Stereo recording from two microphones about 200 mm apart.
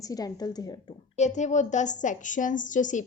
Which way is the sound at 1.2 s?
35° left (ahead or behind).